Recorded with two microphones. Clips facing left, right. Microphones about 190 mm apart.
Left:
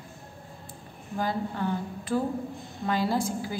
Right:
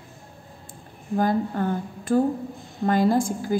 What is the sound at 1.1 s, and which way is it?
A woman's voice, 50° right (ahead or behind).